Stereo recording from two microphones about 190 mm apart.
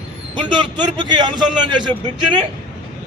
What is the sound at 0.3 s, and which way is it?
A man's voice, 25° right (ahead or behind).